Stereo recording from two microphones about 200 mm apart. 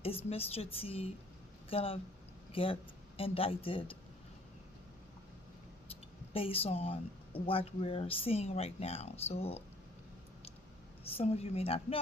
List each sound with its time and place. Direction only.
0.3 s speech: 30° left (ahead or behind)
5.9 s speech: 30° left (ahead or behind)
11.2 s speech: 30° left (ahead or behind)